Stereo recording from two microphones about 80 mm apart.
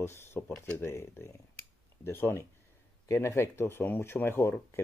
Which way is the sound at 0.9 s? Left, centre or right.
Left.